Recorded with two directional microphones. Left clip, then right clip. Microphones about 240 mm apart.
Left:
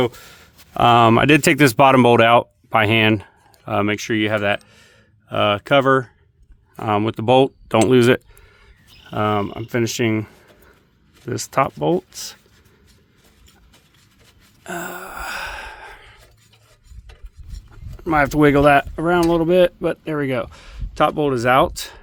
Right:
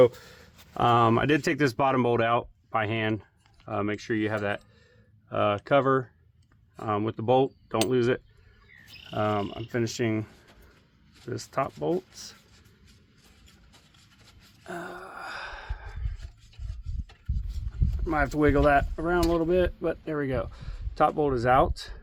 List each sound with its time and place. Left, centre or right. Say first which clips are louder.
0.0 s speech: right 1 dB; left
6.7 s speech: left 9 dB; left
14.6 s gasp: left 9 dB; left
18.0 s speech: left 9 dB; left